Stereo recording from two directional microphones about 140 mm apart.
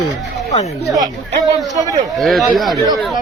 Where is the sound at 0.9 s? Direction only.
25° right (ahead or behind).